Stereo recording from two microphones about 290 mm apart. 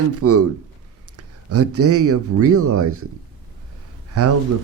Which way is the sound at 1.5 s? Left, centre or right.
Right.